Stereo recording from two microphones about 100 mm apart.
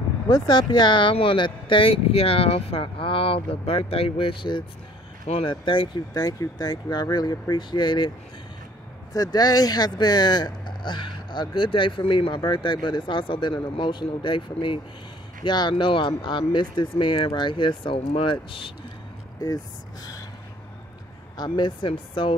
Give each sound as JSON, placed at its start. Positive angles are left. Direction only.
{"t": 0.3, "sound": "speech", "side_deg": 45}
{"t": 6.1, "sound": "speech", "side_deg": 40}
{"t": 9.1, "sound": "speech", "side_deg": 40}
{"t": 15.4, "sound": "speech", "side_deg": 45}
{"t": 15.8, "sound": "speech", "side_deg": 55}
{"t": 21.4, "sound": "speech", "side_deg": 50}